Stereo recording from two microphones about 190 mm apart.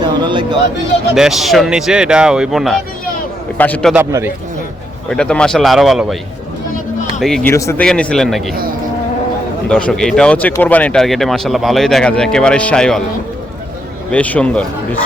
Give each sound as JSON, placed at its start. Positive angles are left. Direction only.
{"t": 0.0, "sound": "a sound", "side_deg": -25}
{"t": 1.1, "sound": "speech", "side_deg": 0}
{"t": 3.9, "sound": "speech", "side_deg": -10}
{"t": 5.0, "sound": "speech", "side_deg": 5}
{"t": 7.2, "sound": "speech", "side_deg": 0}
{"t": 7.5, "sound": "speech", "side_deg": 15}
{"t": 7.9, "sound": "speech", "side_deg": 5}
{"t": 9.6, "sound": "speech", "side_deg": 5}
{"t": 14.1, "sound": "speech", "side_deg": 5}